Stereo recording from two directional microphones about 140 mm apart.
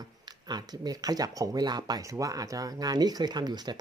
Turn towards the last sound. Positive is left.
turn(degrees=-30)  # may be behind; listen again after turning